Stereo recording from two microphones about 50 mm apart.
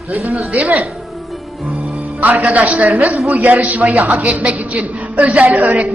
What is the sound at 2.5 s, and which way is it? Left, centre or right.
A woman's voice, right.